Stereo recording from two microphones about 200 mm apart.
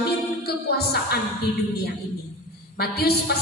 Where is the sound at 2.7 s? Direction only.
50° left (ahead or behind).